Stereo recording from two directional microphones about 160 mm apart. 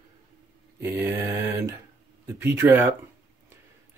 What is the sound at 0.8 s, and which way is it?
Speech, 15° right (ahead or behind).